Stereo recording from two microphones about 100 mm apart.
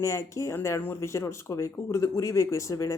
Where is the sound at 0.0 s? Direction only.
30° left (ahead or behind).